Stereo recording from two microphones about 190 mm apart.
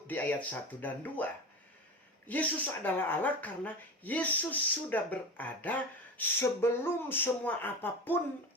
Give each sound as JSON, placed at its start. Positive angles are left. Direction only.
{"t": 0.1, "sound": "speech", "side_deg": 10}